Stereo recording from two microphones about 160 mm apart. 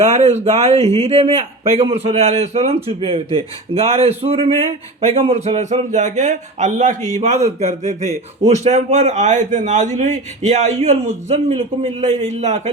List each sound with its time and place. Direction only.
0.0 s a man's voice: 45° right (ahead or behind)